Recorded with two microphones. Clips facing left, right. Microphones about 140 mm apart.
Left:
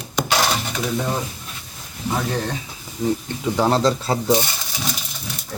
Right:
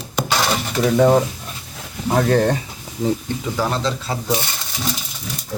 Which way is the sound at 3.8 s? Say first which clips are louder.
Left 4 dB; 40° left (ahead or behind).